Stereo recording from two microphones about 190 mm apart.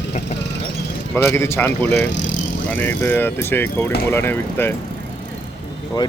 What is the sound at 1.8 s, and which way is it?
Speech, 65° left (ahead or behind).